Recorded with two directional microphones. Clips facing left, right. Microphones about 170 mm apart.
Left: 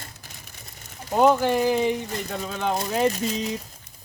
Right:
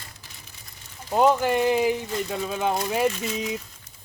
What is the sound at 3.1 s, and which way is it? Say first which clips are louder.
Speech: left 4 dB; 40° left (ahead or behind).